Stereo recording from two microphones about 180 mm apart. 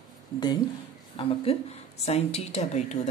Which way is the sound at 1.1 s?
35° left (ahead or behind).